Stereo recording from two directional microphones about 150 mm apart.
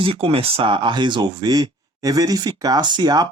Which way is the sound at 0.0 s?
40° right (ahead or behind).